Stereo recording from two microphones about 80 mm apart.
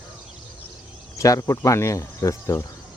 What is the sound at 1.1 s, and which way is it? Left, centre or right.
Speech, left.